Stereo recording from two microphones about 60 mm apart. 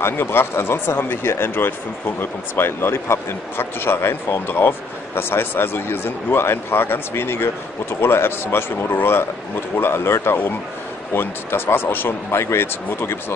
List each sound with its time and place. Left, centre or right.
0.0 s speech: left